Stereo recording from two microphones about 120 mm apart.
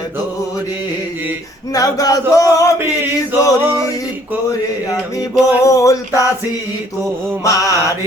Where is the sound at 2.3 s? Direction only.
30° left (ahead or behind).